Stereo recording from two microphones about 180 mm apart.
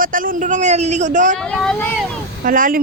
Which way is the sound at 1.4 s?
5° left (ahead or behind).